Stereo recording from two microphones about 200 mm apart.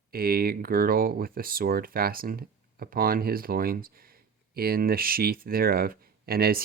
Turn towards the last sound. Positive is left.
turn(degrees=-50)  # may be behind; listen again after turning